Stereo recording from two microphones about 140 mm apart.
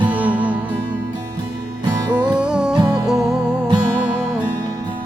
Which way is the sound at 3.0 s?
5° right (ahead or behind).